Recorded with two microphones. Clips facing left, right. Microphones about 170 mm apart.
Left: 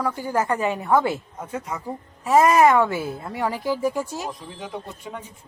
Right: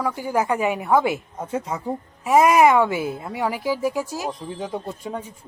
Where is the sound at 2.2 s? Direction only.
10° right (ahead or behind).